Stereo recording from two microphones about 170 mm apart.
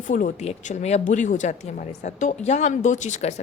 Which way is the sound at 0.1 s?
55° left (ahead or behind).